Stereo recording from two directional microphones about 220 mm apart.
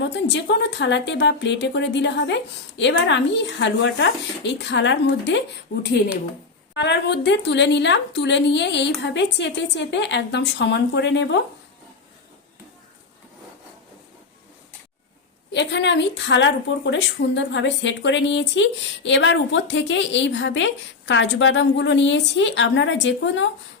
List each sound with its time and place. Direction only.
0.0 s a woman's voice: 55° left (ahead or behind)
5.7 s speech: 35° left (ahead or behind)
6.7 s a woman's voice: 50° left (ahead or behind)
15.5 s speech: 50° left (ahead or behind)